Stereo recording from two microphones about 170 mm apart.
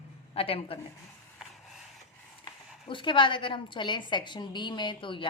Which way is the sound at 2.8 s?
30° left (ahead or behind).